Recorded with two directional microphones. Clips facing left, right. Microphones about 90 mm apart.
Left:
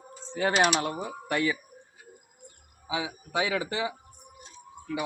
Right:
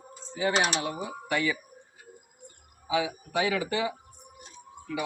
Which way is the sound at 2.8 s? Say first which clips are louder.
Right 4 dB; 25° left (ahead or behind).